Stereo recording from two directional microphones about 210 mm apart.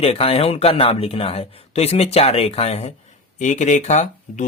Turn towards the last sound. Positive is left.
turn(degrees=35)  # may be behind; listen again after turning